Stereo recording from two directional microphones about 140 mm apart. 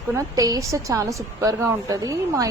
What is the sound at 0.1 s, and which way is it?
A woman's voice, 25° right (ahead or behind).